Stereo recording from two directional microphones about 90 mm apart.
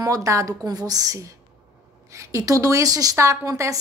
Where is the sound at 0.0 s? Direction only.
40° right (ahead or behind).